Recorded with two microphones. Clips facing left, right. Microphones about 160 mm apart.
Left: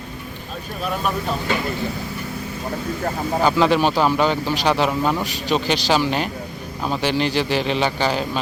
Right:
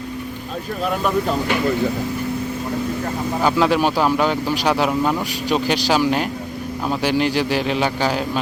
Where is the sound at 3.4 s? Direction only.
5° right (ahead or behind).